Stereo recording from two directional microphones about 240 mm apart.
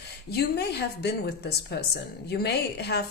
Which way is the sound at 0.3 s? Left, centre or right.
Left.